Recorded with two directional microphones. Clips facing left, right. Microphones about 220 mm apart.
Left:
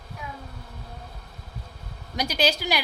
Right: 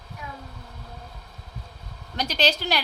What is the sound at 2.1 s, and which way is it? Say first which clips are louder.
Speech: even; 10° left (ahead or behind).